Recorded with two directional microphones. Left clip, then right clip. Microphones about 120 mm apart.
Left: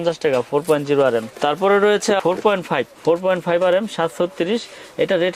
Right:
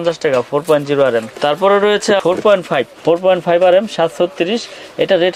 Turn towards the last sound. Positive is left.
turn(degrees=45)  # may be behind; listen again after turning